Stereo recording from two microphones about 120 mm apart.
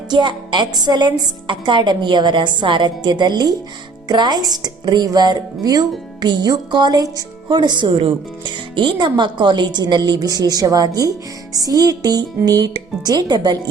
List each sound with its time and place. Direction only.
0.1 s a woman's voice: 40° right (ahead or behind)